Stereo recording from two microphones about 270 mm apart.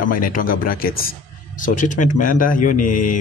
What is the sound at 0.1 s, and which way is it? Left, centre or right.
A man's voice, left.